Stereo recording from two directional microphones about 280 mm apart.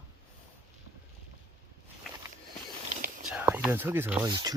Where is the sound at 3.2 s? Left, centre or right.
Centre.